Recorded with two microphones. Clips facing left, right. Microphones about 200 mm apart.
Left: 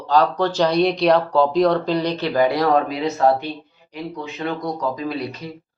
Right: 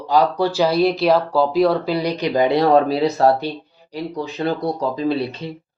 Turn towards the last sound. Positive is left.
turn(degrees=-30)  # may be behind; listen again after turning